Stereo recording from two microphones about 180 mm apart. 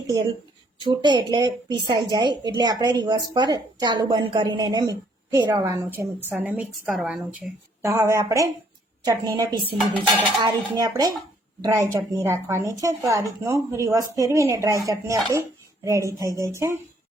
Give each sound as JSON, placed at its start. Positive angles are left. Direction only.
{"t": 0.8, "sound": "a woman's voice", "side_deg": -25}